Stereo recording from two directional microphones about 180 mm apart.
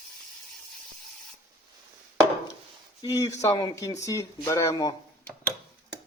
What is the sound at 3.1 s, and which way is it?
Speech, 15° left (ahead or behind).